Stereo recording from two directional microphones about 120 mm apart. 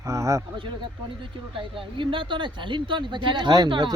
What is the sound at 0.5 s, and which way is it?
Speech, 45° right (ahead or behind).